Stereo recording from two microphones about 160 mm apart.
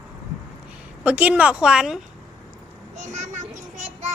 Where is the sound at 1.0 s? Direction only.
10° right (ahead or behind).